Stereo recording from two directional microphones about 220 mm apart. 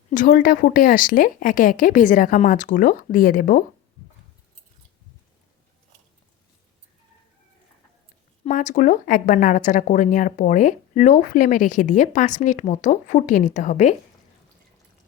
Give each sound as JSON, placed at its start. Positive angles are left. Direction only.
{"t": 0.1, "sound": "speech", "side_deg": 35}
{"t": 8.4, "sound": "speech", "side_deg": 35}